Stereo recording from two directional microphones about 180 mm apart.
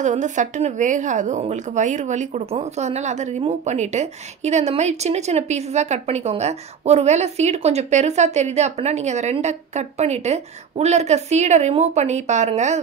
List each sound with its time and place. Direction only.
0.0 s speech: 45° right (ahead or behind)